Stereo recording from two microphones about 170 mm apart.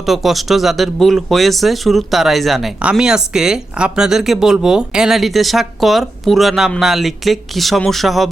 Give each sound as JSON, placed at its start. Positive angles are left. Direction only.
{"t": 0.0, "sound": "speech", "side_deg": 0}